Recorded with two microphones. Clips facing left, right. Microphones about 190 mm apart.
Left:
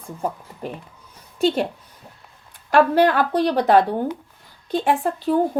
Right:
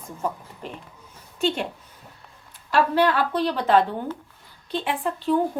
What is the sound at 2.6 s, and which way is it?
A woman's voice, 45° left (ahead or behind).